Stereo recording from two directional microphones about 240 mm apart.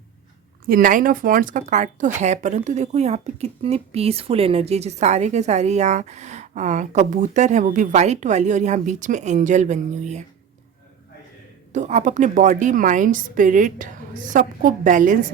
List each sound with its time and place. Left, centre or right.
0.7 s a woman's voice: right
11.7 s a woman's voice: right